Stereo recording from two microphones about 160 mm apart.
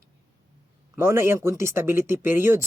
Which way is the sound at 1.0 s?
15° right (ahead or behind).